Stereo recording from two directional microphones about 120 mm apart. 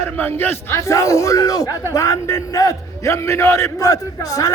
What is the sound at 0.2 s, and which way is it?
A man's voice, 15° left (ahead or behind).